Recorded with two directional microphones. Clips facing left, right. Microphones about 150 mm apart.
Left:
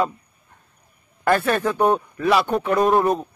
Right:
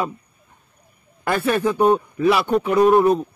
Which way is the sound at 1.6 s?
15° right (ahead or behind).